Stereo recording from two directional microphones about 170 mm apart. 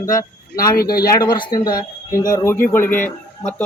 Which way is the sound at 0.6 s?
60° left (ahead or behind).